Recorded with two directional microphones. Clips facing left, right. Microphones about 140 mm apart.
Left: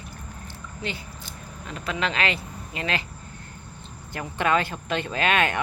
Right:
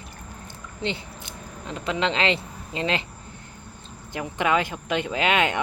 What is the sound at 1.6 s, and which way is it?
Speech, 25° right (ahead or behind).